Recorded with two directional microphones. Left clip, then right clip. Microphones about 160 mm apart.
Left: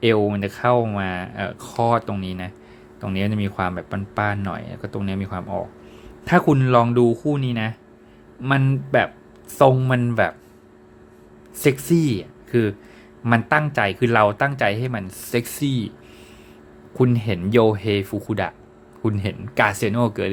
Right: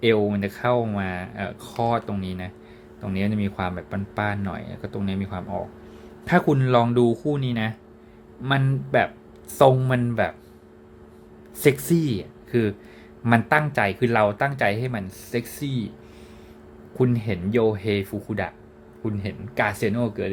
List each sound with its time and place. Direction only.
0.0 s a man's voice: 25° left (ahead or behind)
11.6 s a man's voice: 10° left (ahead or behind)
11.9 s a man's voice: 20° left (ahead or behind)
15.3 s speech: 30° left (ahead or behind)
17.0 s speech: 20° left (ahead or behind)
17.5 s speech: 35° left (ahead or behind)
17.7 s speech: 20° left (ahead or behind)